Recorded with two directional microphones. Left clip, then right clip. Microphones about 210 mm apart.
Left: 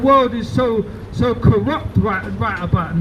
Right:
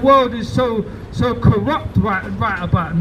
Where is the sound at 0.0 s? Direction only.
30° right (ahead or behind).